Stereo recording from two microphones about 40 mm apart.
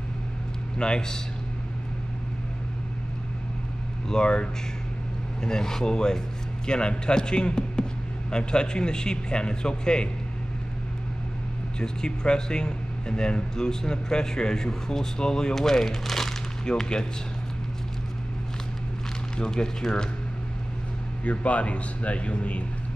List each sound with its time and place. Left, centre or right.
0.7 s a man's voice: left
4.1 s a man's voice: left
11.8 s speech: centre
19.3 s a man's voice: centre
21.2 s speech: left